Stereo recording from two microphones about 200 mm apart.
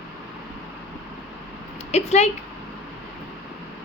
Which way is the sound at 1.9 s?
30° left (ahead or behind).